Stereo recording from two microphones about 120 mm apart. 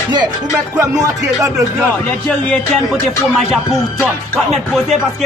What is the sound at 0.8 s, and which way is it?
Music, 25° right (ahead or behind).